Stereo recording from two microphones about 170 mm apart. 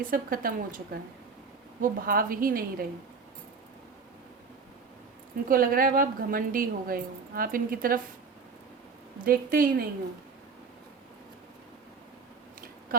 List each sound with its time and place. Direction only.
0.0 s a woman's voice: 55° right (ahead or behind)
1.8 s a woman's voice: 55° right (ahead or behind)
5.5 s a woman's voice: 55° right (ahead or behind)
9.2 s a woman's voice: 55° right (ahead or behind)